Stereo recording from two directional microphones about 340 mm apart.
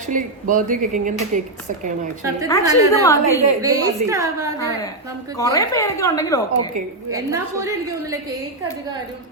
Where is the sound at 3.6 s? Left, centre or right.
Centre.